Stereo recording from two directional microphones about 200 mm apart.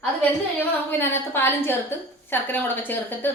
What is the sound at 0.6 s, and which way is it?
A woman's voice, 10° left (ahead or behind).